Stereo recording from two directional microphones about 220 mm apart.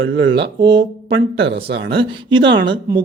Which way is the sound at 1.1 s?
50° right (ahead or behind).